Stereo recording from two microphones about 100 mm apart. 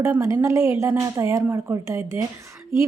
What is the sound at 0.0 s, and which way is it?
A woman's voice, 30° right (ahead or behind).